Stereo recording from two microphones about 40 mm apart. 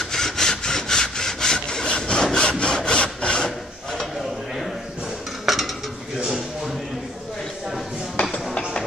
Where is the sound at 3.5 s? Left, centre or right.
Centre.